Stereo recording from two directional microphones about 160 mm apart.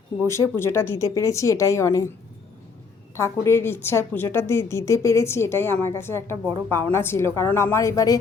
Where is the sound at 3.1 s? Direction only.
15° left (ahead or behind).